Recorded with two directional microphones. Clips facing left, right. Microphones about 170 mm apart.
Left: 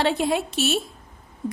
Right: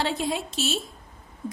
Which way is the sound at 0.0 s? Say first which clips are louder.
Left 5 dB; 65° left (ahead or behind).